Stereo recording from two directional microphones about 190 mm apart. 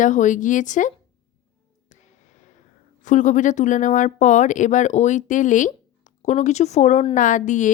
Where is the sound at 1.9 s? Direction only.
40° left (ahead or behind).